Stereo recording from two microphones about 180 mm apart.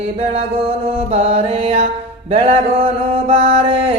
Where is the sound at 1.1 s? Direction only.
35° right (ahead or behind).